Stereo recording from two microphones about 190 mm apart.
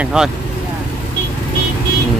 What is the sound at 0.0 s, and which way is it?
Speech, 5° right (ahead or behind).